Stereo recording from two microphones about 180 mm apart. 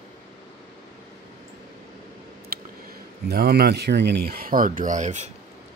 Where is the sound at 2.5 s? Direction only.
55° right (ahead or behind).